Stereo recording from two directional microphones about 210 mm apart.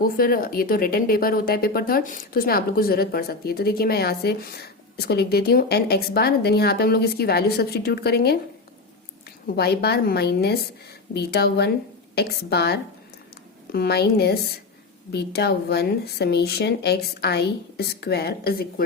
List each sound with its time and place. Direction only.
0.0 s speech: 45° left (ahead or behind)
9.6 s speech: 50° left (ahead or behind)